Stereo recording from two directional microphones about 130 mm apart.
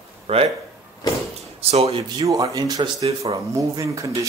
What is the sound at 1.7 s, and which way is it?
Speech, 50° right (ahead or behind).